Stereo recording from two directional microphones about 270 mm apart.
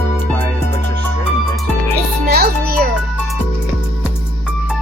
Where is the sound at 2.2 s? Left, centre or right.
Right.